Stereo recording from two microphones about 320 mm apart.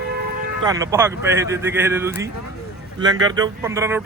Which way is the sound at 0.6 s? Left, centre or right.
Centre.